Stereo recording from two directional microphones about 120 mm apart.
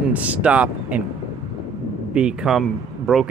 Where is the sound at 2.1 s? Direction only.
10° right (ahead or behind).